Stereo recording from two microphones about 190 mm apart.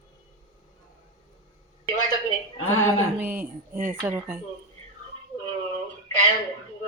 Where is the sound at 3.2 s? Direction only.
10° right (ahead or behind).